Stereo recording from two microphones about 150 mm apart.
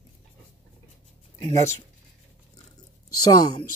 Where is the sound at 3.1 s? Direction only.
25° left (ahead or behind).